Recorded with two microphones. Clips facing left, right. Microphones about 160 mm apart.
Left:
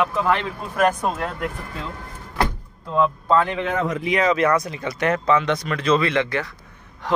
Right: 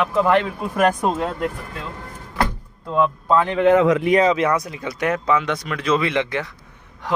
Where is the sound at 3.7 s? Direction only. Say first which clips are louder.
Right 9 dB; 85° right.